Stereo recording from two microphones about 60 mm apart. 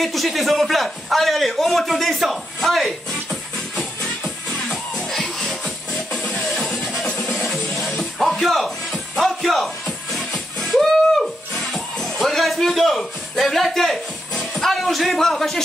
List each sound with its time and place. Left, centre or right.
0.0 s a man's voice: centre
3.7 s music: centre
5.1 s music: centre
9.2 s a man's voice: centre
10.1 s music: centre